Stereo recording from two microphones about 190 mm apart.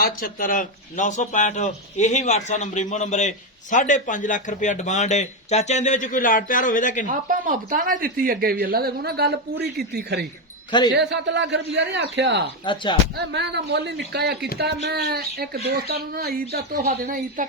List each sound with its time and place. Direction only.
0.0 s speech: 50° left (ahead or behind)
7.1 s speech: 45° right (ahead or behind)
10.7 s speech: 25° left (ahead or behind)
10.9 s speech: 65° right (ahead or behind)
12.6 s speech: 25° left (ahead or behind)
13.1 s speech: 65° right (ahead or behind)
17.0 s speech: 45° right (ahead or behind)